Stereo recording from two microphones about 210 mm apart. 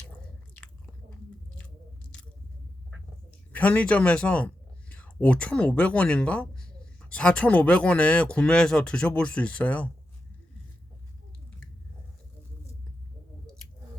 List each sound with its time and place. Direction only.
3.5 s speech: 5° left (ahead or behind)